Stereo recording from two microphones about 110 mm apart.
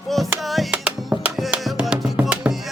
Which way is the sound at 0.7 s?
15° right (ahead or behind).